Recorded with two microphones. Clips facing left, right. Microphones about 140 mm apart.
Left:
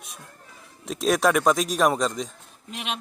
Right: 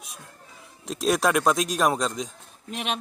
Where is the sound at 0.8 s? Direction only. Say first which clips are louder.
Left 2 dB; centre (ahead or behind).